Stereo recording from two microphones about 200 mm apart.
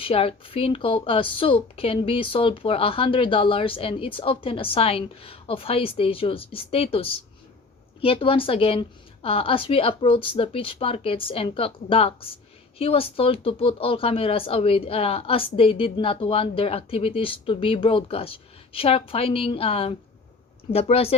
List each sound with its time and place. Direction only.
0.0 s a woman's voice: 30° left (ahead or behind)